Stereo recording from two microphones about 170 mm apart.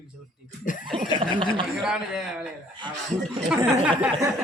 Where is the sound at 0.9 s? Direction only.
30° right (ahead or behind).